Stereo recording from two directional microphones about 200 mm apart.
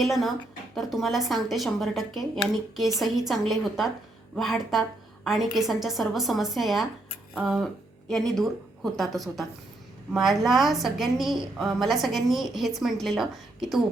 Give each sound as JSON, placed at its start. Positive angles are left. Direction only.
{"t": 0.0, "sound": "a woman's voice", "side_deg": 0}